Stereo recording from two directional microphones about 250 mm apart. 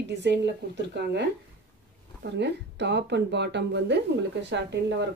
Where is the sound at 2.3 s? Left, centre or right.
Right.